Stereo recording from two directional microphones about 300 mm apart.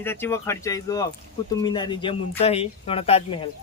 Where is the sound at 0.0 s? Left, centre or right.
Centre.